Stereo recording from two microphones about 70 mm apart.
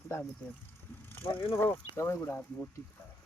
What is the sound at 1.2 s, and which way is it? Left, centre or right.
Speech, left.